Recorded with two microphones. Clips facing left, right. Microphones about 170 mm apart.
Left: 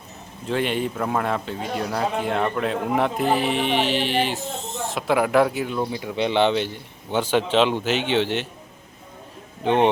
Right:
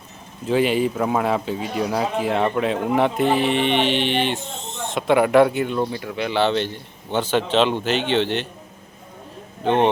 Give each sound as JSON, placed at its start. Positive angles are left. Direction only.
{"t": 0.4, "sound": "a man's voice", "side_deg": -5}
{"t": 5.9, "sound": "a man's voice", "side_deg": 15}
{"t": 9.6, "sound": "a man's voice", "side_deg": 10}